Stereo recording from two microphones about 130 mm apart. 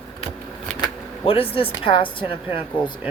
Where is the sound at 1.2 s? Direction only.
45° left (ahead or behind).